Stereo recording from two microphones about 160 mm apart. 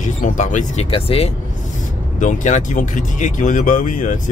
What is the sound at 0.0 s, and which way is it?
Speech, 50° left (ahead or behind).